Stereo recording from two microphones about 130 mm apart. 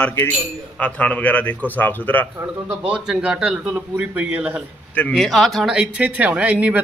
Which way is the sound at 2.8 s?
5° right (ahead or behind).